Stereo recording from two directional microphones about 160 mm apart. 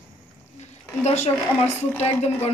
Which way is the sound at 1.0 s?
45° left (ahead or behind).